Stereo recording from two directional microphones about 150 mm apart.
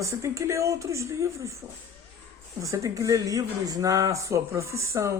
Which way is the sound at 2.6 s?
20° right (ahead or behind).